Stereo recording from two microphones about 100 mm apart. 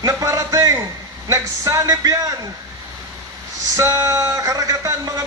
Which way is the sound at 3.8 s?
35° right (ahead or behind).